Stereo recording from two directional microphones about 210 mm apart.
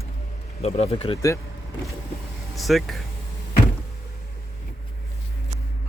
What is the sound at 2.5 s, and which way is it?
Speech, centre (ahead or behind).